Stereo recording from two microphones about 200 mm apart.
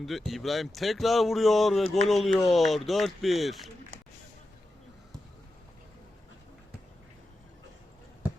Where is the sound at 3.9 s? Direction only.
80° right.